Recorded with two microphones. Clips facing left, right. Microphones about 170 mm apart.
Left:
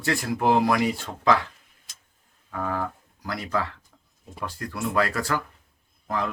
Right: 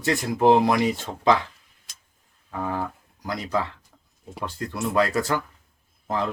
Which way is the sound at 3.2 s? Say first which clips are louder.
Right 2 dB; 20° right (ahead or behind).